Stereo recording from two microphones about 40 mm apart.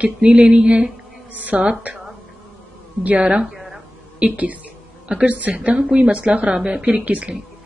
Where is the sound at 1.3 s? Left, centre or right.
Right.